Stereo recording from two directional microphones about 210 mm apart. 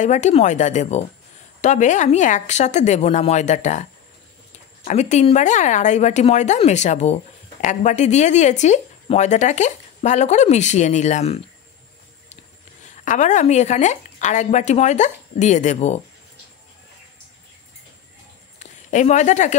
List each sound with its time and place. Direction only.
0.0 s speech: 35° left (ahead or behind)
4.8 s speech: 35° left (ahead or behind)
12.8 s speech: 35° left (ahead or behind)
18.6 s a sound: 35° left (ahead or behind)